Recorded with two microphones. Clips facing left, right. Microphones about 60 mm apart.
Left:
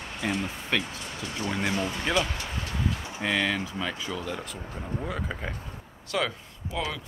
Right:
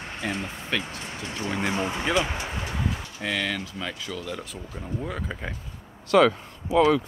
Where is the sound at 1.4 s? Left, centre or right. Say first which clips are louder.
Right 2 dB; right.